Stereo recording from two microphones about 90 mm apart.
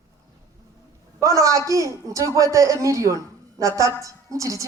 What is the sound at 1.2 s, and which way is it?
A man's voice, 35° right (ahead or behind).